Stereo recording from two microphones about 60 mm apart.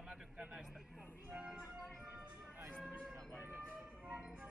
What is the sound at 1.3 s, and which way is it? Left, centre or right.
Music, centre.